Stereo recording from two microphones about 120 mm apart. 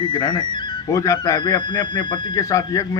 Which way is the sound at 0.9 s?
25° left (ahead or behind).